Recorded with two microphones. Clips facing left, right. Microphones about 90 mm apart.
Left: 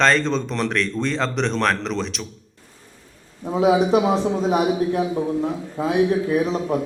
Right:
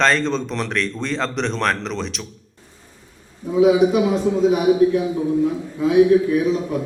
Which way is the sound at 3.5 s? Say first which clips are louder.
Right 2 dB; 40° left (ahead or behind).